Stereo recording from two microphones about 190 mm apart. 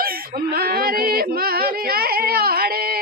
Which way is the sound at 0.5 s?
55° right (ahead or behind).